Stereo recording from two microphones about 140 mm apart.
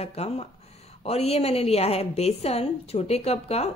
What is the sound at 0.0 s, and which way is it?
A woman's voice, 45° left (ahead or behind).